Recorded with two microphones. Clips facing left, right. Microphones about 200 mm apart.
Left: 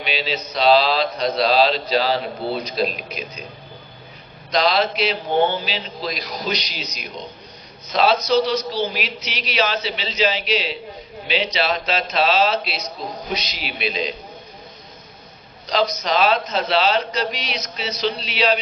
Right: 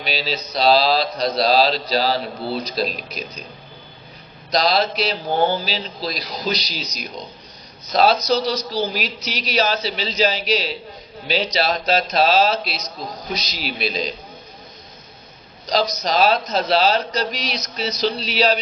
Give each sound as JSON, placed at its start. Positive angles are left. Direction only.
{"t": 0.0, "sound": "speech", "side_deg": -40}
{"t": 4.5, "sound": "speech", "side_deg": -40}
{"t": 15.6, "sound": "speech", "side_deg": -40}